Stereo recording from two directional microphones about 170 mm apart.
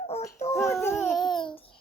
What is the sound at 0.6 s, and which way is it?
Speech, 15° left (ahead or behind).